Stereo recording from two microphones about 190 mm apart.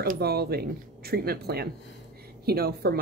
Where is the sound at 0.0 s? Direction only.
55° right (ahead or behind).